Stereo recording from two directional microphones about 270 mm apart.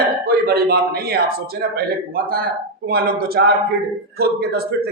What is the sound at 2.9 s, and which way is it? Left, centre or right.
A man's voice, right.